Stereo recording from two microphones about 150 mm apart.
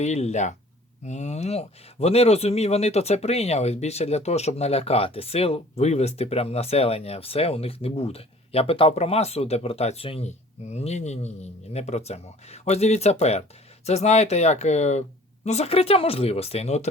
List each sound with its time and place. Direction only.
0.0 s speech: 50° left (ahead or behind)